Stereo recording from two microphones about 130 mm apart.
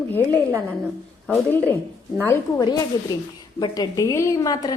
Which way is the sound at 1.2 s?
10° left (ahead or behind).